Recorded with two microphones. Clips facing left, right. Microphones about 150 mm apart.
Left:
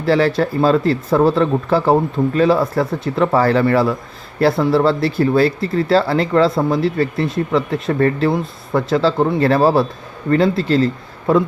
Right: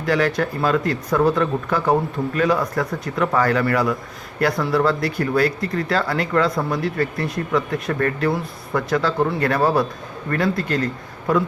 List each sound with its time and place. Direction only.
0.0 s speech: 30° left (ahead or behind)